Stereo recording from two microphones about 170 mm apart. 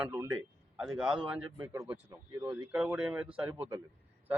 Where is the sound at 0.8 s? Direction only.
5° right (ahead or behind).